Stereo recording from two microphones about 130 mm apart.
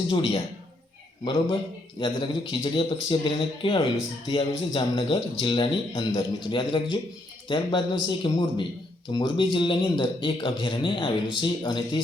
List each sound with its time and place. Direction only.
0.1 s a man's voice: 45° left (ahead or behind)
1.2 s speech: 35° left (ahead or behind)
6.0 s speech: 25° left (ahead or behind)